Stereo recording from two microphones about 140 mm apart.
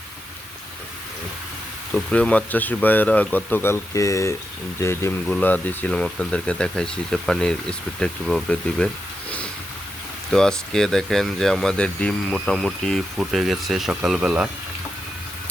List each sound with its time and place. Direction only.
1.9 s speech: 10° left (ahead or behind)
10.3 s speech: 5° left (ahead or behind)